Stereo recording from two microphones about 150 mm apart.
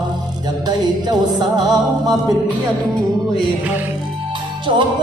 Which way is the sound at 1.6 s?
25° right (ahead or behind).